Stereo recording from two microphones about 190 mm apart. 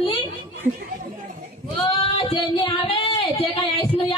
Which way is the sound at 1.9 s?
30° left (ahead or behind).